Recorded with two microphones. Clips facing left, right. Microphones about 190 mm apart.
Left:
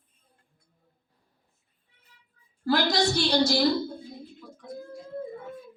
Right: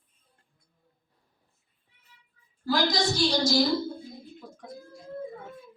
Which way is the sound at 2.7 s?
65° left (ahead or behind).